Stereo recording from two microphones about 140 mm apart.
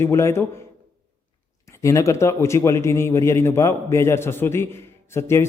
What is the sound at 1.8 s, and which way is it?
A man's voice, 20° left (ahead or behind).